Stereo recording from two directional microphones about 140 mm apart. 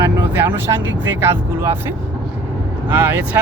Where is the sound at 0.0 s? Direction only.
15° right (ahead or behind).